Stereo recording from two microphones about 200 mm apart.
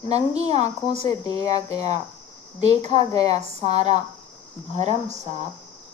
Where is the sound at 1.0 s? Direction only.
20° left (ahead or behind).